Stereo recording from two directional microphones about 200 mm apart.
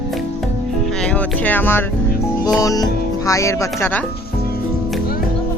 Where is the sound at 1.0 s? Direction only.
10° left (ahead or behind).